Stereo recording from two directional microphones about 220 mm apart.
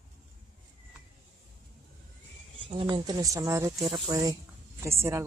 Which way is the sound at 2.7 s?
20° right (ahead or behind).